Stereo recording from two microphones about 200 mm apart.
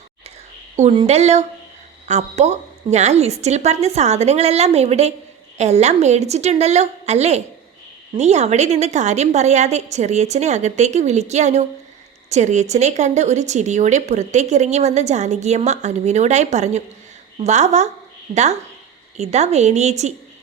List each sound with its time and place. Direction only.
0.8 s speech: 30° right (ahead or behind)
19.1 s speech: 35° right (ahead or behind)